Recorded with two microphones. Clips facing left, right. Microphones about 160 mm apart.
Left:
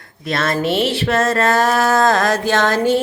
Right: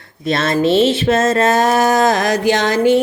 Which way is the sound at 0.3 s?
25° right (ahead or behind).